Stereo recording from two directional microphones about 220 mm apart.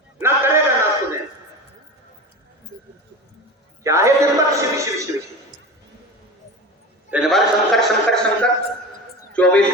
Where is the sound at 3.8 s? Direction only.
15° right (ahead or behind).